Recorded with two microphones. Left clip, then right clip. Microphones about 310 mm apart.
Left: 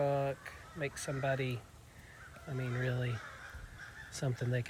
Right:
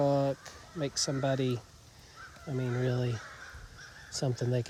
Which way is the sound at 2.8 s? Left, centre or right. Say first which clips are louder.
Right 3 dB; centre.